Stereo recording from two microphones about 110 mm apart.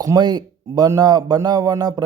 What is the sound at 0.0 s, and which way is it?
Speech, 35° right (ahead or behind).